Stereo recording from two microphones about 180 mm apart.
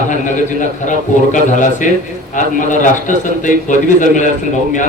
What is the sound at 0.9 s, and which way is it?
A man's voice, 45° left (ahead or behind).